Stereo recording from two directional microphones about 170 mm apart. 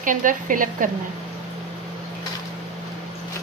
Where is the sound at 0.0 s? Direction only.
50° right (ahead or behind).